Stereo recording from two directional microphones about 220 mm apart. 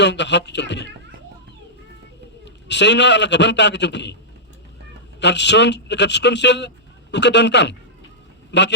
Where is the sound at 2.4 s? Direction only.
50° left (ahead or behind).